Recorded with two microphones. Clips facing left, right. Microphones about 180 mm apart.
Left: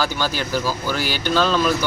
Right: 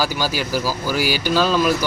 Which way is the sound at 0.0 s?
10° right (ahead or behind).